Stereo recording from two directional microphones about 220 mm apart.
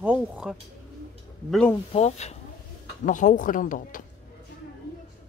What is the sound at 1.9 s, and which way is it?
Speech, 30° left (ahead or behind).